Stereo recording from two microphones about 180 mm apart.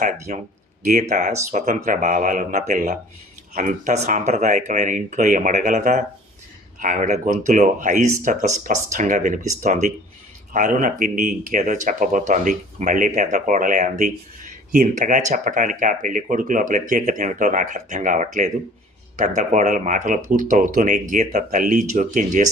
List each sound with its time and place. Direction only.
1.1 s speech: 40° right (ahead or behind)